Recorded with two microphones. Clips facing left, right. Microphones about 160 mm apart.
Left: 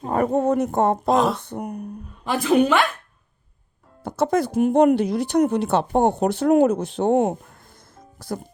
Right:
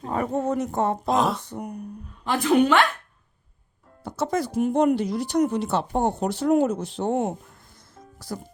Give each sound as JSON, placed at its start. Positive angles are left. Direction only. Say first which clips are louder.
{"t": 0.0, "sound": "speech", "louder": "left 5 dB", "side_deg": 50}
{"t": 1.0, "sound": "speech", "louder": "left 3 dB", "side_deg": 0}
{"t": 1.4, "sound": "speech", "louder": "left 3 dB", "side_deg": 55}
{"t": 2.2, "sound": "speech", "louder": "left 1 dB", "side_deg": 10}
{"t": 4.0, "sound": "speech", "louder": "left 5 dB", "side_deg": 55}